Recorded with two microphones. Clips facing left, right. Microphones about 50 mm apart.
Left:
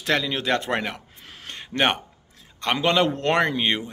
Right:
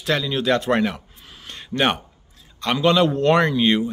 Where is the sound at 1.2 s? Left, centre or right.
Left.